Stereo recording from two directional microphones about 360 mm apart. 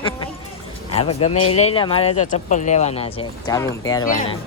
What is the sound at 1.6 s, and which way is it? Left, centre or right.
Speech, centre.